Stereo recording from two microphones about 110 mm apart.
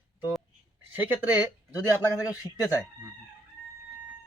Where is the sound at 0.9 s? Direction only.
15° right (ahead or behind).